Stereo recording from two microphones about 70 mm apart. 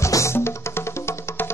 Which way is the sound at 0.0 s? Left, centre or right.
Left.